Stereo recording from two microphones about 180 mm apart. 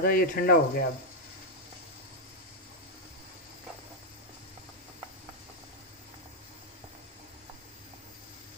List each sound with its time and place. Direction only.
0.0 s speech: 55° left (ahead or behind)